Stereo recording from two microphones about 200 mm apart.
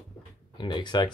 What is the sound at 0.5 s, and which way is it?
Speech, 20° left (ahead or behind).